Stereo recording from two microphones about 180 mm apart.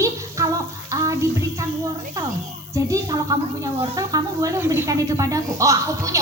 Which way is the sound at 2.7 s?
20° right (ahead or behind).